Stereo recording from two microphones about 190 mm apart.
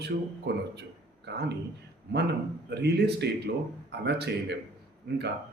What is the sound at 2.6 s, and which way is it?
Speech, 60° right (ahead or behind).